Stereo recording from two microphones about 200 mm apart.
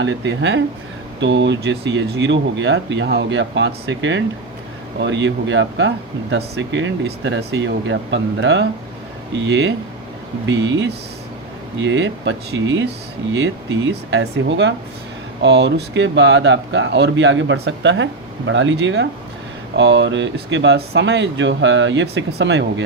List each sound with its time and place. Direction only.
0.0 s speech: 65° right (ahead or behind)